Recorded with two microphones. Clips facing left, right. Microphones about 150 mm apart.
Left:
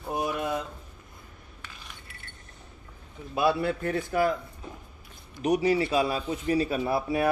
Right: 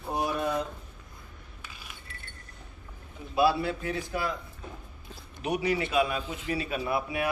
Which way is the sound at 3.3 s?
50° left (ahead or behind).